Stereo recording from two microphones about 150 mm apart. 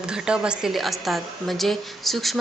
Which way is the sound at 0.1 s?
5° right (ahead or behind).